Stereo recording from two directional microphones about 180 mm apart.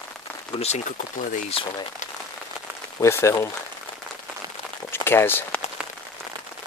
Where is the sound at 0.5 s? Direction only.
35° left (ahead or behind).